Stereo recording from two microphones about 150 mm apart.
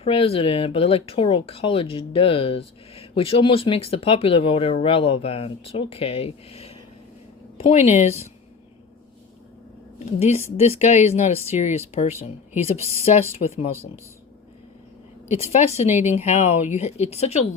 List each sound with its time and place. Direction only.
0.0 s speech: 40° left (ahead or behind)
10.2 s speech: 45° left (ahead or behind)
15.4 s speech: 45° left (ahead or behind)